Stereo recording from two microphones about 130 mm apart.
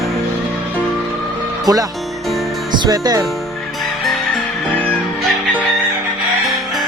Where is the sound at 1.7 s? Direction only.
30° right (ahead or behind).